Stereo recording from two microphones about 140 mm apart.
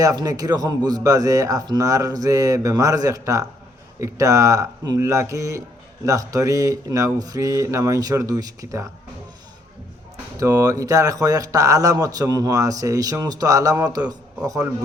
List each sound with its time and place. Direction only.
0.0 s speech: 25° right (ahead or behind)
10.3 s speech: 25° right (ahead or behind)